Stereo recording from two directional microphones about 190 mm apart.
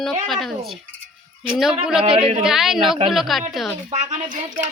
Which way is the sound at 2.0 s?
30° right (ahead or behind).